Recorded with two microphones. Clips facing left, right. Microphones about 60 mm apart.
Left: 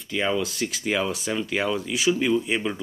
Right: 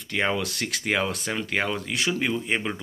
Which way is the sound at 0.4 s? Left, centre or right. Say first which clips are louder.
Left 2 dB; right.